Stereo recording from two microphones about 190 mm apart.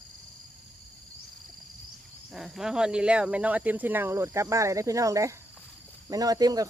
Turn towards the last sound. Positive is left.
turn(degrees=-20)  # may be behind; listen again after turning